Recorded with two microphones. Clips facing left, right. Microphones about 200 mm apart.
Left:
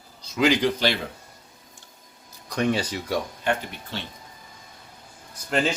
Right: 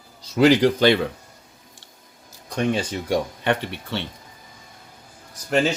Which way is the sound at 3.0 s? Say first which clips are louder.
Right 6 dB; 70° right (ahead or behind).